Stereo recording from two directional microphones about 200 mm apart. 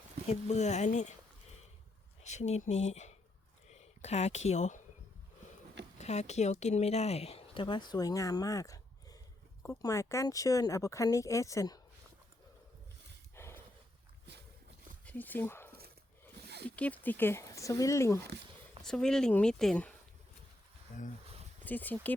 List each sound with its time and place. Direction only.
0.3 s speech: 35° left (ahead or behind)
2.2 s speech: 35° left (ahead or behind)
6.0 s a woman's voice: 35° left (ahead or behind); by 11.8 s 15° left (ahead or behind)
13.3 s horse: 10° left (ahead or behind)
15.0 s speech: 10° left (ahead or behind)
18.8 s speech: 5° left (ahead or behind)
21.6 s speech: 10° left (ahead or behind)